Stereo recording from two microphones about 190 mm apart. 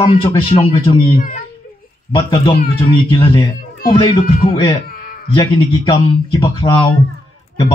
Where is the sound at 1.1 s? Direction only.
45° left (ahead or behind).